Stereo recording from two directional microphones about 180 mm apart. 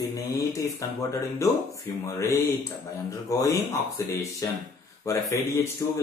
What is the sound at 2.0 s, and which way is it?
Speech, 15° left (ahead or behind).